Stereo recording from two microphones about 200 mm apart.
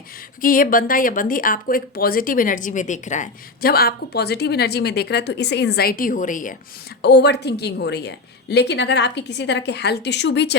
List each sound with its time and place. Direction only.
0.4 s speech: 45° left (ahead or behind)
7.0 s a woman's voice: 55° left (ahead or behind)